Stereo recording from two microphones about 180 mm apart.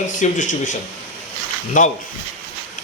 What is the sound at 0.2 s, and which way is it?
Speech, 45° left (ahead or behind).